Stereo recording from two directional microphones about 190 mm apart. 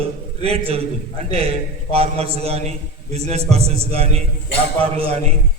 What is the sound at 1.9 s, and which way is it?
A man's voice, 30° right (ahead or behind).